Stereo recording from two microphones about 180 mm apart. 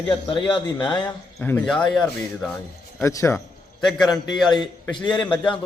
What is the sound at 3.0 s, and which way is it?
Speech, 15° left (ahead or behind).